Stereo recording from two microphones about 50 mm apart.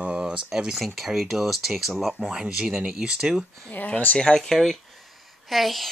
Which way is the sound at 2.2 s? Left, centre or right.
Centre.